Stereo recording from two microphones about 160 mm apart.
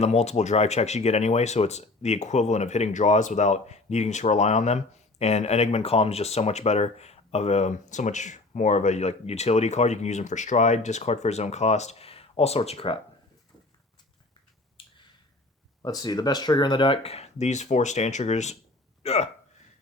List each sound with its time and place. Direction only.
0.0 s speech: 45° left (ahead or behind)
15.8 s speech: 25° left (ahead or behind); by 19.3 s 40° left (ahead or behind)